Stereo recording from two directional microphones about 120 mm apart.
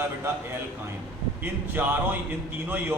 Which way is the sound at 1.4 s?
15° right (ahead or behind).